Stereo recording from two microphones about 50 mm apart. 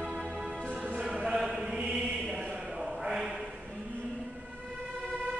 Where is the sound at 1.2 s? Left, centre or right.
Centre.